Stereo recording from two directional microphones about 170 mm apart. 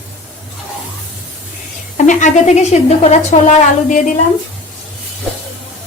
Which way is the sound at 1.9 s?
45° left (ahead or behind).